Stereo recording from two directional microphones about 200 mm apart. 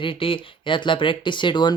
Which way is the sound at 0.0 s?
25° left (ahead or behind).